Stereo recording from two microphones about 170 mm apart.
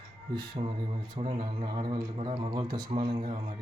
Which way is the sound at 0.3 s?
30° right (ahead or behind).